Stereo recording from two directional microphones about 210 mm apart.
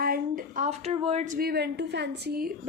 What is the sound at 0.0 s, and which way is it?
A woman's voice, 45° right (ahead or behind).